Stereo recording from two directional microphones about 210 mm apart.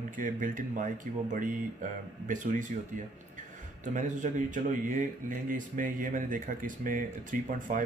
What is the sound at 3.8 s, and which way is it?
Speech, 35° right (ahead or behind).